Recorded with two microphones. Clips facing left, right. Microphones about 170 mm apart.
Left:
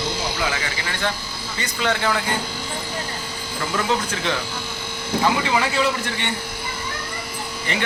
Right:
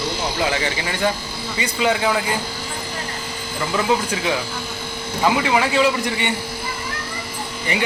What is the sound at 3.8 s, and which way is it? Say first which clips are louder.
Speech: right 3 dB; 10° right (ahead or behind).